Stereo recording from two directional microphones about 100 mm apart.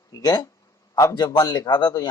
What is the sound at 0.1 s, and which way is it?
A man's voice, 40° left (ahead or behind).